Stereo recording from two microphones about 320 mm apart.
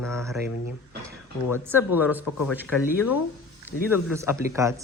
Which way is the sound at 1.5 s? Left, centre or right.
Centre.